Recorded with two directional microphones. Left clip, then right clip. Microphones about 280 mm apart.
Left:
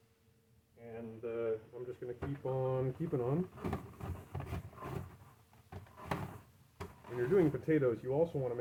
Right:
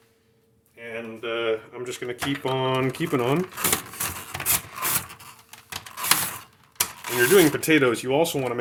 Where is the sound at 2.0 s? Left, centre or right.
Right.